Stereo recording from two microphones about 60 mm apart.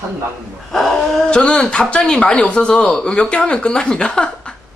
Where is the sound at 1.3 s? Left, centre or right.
Centre.